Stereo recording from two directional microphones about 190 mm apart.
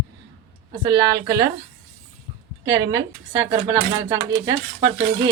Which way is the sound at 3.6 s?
20° right (ahead or behind).